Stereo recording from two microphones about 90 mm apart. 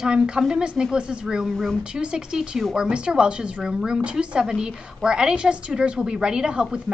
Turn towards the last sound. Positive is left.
turn(degrees=-10)  # may be behind; listen again after turning